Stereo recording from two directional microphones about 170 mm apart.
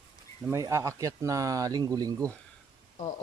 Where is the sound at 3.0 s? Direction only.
50° left (ahead or behind).